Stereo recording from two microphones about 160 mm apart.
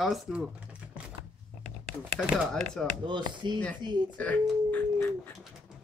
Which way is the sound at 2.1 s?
5° left (ahead or behind).